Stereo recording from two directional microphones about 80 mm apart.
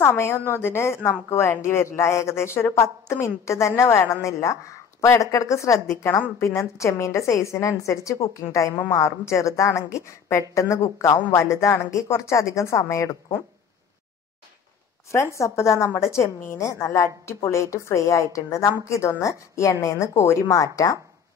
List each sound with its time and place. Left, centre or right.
0.0 s a woman's voice: left
15.3 s a woman's voice: left